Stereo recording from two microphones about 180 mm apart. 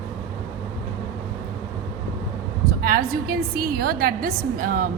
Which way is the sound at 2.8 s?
55° right (ahead or behind).